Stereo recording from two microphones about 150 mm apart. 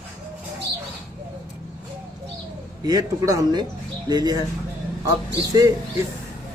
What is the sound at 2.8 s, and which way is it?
Speech, 25° right (ahead or behind).